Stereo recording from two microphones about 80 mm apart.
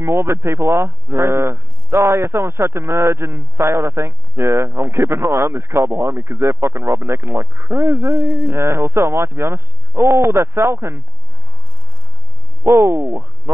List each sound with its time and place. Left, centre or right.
0.0 s speech: right
12.6 s speech: right